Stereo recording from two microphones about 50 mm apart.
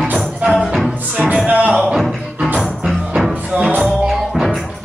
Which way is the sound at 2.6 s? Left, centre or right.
Centre.